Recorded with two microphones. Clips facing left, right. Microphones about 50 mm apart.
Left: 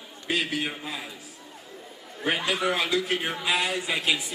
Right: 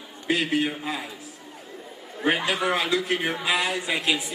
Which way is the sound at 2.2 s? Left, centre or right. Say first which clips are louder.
Right 2 dB; right.